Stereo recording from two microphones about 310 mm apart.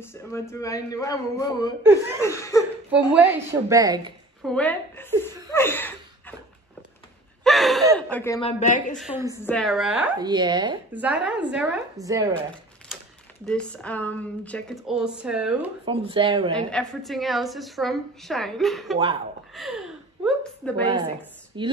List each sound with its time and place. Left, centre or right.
0.0 s speech: centre
1.8 s speech: centre
2.2 s speech: centre
3.6 s speech: centre
4.4 s a woman's voice: centre
5.5 s a sound: centre
7.4 s gasp: centre
8.1 s speech: centre
8.9 s a woman's voice: centre
13.5 s a woman's voice: centre
15.8 s speech: centre
16.5 s a woman's voice: centre
19.5 s a sound: centre
21.5 s speech: centre